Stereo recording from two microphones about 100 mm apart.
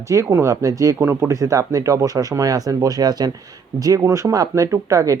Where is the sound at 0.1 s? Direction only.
30° right (ahead or behind).